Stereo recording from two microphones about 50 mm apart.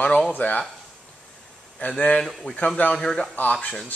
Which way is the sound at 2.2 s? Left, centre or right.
Centre.